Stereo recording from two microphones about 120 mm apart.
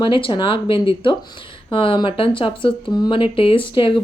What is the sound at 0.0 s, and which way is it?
Speech, 45° left (ahead or behind).